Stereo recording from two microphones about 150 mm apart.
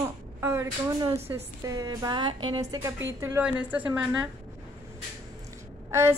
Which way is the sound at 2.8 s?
20° right (ahead or behind).